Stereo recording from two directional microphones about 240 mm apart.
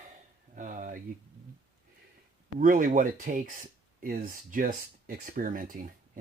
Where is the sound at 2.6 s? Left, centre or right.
Right.